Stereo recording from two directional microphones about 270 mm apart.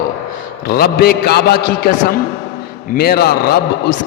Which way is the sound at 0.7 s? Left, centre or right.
Left.